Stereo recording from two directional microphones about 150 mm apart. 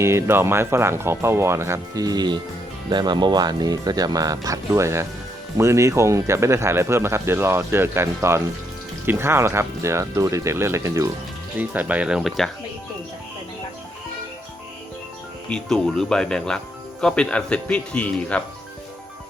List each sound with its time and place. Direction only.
0.0 s speech: 15° right (ahead or behind)
15.4 s speech: 5° left (ahead or behind)